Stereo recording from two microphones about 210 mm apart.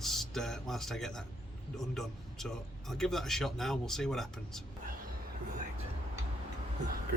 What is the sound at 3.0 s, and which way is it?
Speech, centre (ahead or behind).